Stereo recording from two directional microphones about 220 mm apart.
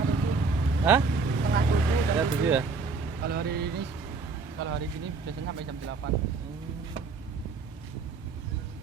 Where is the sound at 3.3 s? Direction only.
45° right (ahead or behind).